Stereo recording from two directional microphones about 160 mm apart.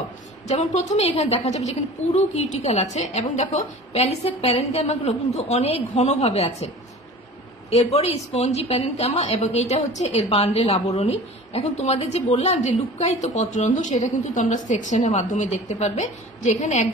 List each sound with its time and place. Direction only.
0.5 s a woman's voice: 45° left (ahead or behind)
7.8 s a woman's voice: 40° left (ahead or behind)